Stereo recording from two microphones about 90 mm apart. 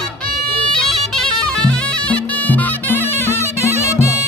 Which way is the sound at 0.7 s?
5° left (ahead or behind).